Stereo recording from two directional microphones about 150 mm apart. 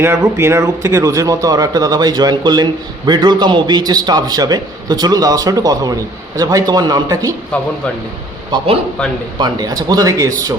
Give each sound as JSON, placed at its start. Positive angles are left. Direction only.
{"t": 0.0, "sound": "a man's voice", "side_deg": -15}
{"t": 9.4, "sound": "a man's voice", "side_deg": -25}